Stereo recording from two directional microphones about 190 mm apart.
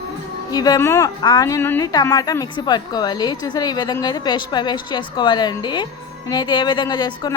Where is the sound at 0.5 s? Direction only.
20° left (ahead or behind).